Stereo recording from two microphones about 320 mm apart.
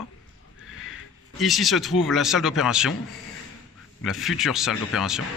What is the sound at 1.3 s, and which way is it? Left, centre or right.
A man's voice, centre.